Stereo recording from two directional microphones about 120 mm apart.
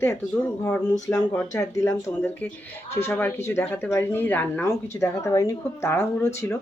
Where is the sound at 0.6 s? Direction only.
15° left (ahead or behind).